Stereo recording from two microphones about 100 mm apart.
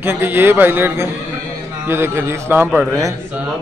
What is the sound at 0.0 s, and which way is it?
A man's voice, 20° right (ahead or behind).